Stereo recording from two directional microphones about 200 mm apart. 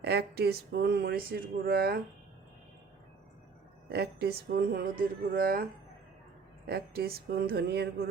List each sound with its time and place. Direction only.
0.0 s speech: 55° right (ahead or behind)
3.8 s speech: 55° right (ahead or behind)
6.7 s speech: 50° right (ahead or behind)